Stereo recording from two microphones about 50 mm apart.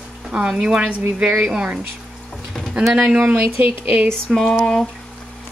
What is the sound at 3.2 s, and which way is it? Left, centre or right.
Speech, right.